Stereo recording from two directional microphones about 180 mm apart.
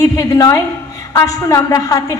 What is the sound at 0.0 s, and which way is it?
A woman's voice, 20° left (ahead or behind).